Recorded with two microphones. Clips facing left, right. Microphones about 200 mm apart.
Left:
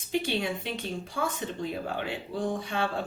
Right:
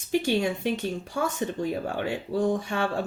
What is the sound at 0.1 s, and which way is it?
Speech, 45° right (ahead or behind).